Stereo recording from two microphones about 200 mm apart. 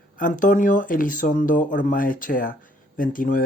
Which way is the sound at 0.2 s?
40° left (ahead or behind).